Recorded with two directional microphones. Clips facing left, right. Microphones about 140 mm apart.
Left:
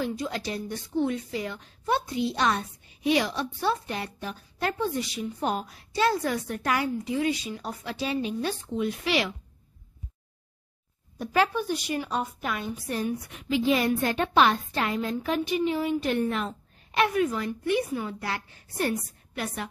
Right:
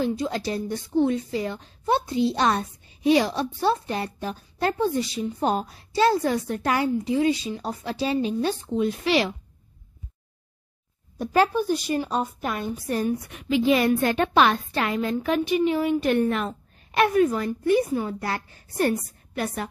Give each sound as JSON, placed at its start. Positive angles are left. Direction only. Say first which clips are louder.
{"t": 0.0, "sound": "a woman's voice", "louder": "right 5 dB", "side_deg": -30}
{"t": 11.1, "sound": "a woman's voice", "louder": "right 4 dB", "side_deg": -40}
{"t": 13.3, "sound": "a woman's voice", "louder": "right 3 dB", "side_deg": -60}